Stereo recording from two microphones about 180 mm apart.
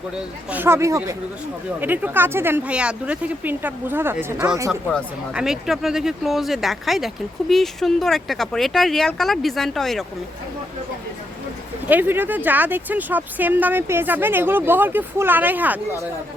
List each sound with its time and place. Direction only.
0.5 s speech: 15° right (ahead or behind)
4.7 s speech: 5° left (ahead or behind)
11.9 s speech: 10° right (ahead or behind)